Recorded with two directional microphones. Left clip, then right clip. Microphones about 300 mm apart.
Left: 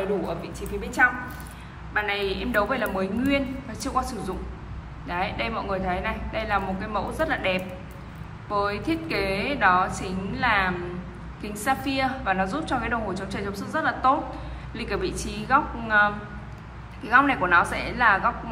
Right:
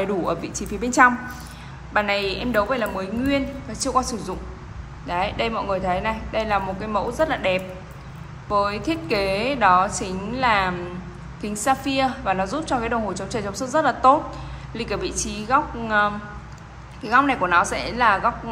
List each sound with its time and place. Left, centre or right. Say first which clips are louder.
0.4 s a woman's voice: right 5 dB; right